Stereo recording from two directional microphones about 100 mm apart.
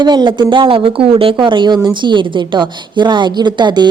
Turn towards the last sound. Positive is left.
turn(degrees=-50)  # may be behind; listen again after turning